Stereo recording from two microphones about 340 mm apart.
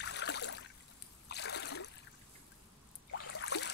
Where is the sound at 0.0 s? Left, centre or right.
Left.